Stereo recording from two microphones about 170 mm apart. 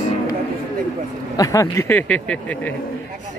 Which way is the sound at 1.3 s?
20° left (ahead or behind).